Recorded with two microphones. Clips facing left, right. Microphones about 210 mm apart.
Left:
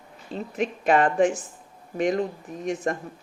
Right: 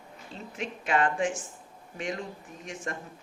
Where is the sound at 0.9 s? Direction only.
40° left (ahead or behind).